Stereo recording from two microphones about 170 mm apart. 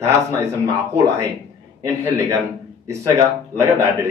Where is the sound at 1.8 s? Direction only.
20° right (ahead or behind).